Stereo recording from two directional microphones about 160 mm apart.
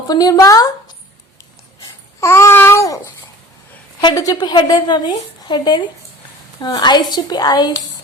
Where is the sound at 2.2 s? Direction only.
15° left (ahead or behind).